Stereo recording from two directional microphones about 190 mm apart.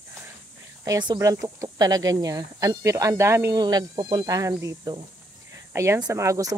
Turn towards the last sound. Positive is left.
turn(degrees=-15)  # may be behind; listen again after turning